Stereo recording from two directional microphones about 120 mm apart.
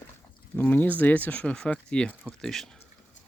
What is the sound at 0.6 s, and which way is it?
Speech, 15° left (ahead or behind).